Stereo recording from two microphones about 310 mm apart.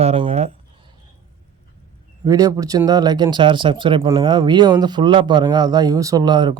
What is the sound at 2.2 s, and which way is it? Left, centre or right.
Speech, centre.